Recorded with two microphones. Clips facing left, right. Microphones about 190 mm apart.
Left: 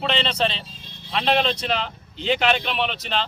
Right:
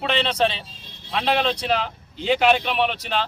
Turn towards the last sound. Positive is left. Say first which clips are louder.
# right 2 dB
turn(degrees=-10)  # may be behind; listen again after turning